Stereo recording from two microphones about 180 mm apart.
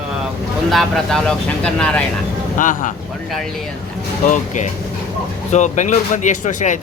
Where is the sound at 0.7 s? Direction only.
Centre (ahead or behind).